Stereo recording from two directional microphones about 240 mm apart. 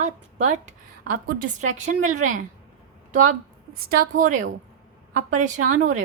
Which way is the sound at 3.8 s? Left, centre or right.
Right.